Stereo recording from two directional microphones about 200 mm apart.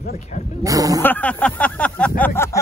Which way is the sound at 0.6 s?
15° right (ahead or behind).